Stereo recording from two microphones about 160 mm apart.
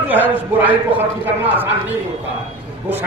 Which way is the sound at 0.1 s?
10° right (ahead or behind).